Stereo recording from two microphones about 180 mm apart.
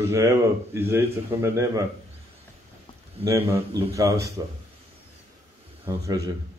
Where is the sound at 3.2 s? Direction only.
15° right (ahead or behind).